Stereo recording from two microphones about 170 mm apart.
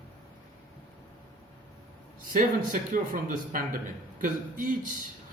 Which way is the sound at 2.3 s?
55° right (ahead or behind).